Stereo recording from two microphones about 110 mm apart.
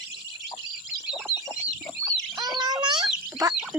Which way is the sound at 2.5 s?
35° right (ahead or behind).